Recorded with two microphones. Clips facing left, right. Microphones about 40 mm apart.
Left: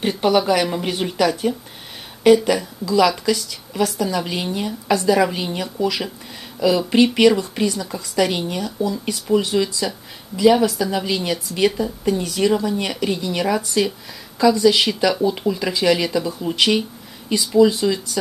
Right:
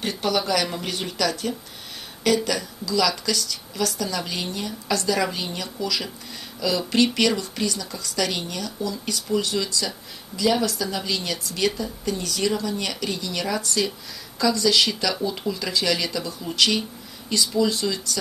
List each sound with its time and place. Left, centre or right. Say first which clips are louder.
0.0 s a woman's voice: left 7 dB; left